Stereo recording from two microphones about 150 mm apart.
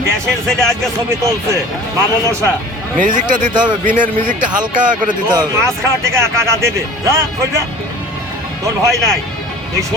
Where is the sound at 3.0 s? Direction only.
60° right (ahead or behind).